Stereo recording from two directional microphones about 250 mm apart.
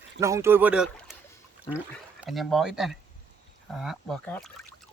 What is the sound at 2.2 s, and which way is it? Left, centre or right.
Speech, centre.